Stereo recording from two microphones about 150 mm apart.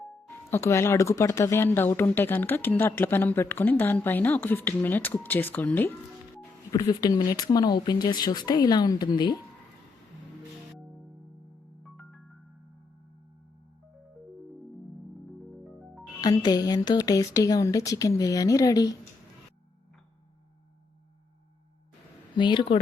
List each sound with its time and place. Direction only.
0.5 s speech: 20° left (ahead or behind)
6.7 s speech: 25° left (ahead or behind)
11.8 s music: 5° left (ahead or behind)
16.2 s speech: 25° left (ahead or behind)
22.4 s speech: 30° left (ahead or behind)